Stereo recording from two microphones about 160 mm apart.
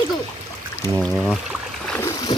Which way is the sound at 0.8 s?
20° right (ahead or behind).